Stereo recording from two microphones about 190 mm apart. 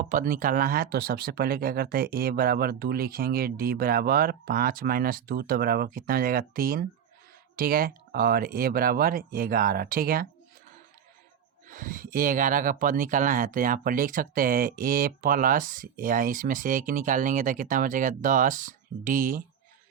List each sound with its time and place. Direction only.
0.0 s speech: 45° right (ahead or behind)
11.7 s speech: 45° right (ahead or behind)